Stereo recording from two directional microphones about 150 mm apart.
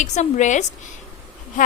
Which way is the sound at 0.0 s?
55° left (ahead or behind).